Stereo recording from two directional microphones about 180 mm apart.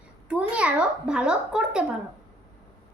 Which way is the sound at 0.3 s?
5° right (ahead or behind).